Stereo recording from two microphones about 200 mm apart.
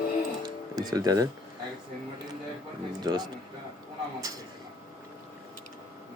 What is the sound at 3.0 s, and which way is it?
Speech, 20° right (ahead or behind).